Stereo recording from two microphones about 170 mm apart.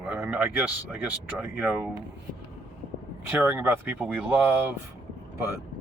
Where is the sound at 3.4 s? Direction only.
10° right (ahead or behind).